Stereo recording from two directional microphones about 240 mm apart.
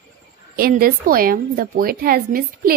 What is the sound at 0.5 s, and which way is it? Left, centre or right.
A woman's voice, right.